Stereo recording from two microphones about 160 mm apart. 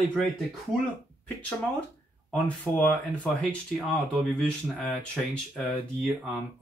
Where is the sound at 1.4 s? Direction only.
10° left (ahead or behind).